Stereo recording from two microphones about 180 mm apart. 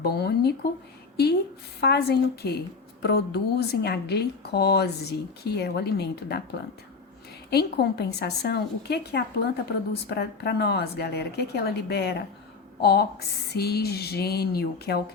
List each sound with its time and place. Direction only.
0.0 s a woman's voice: 65° left (ahead or behind)
7.5 s a woman's voice: 60° left (ahead or behind)